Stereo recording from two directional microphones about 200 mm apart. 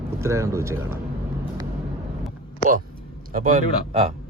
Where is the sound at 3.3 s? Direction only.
45° right (ahead or behind).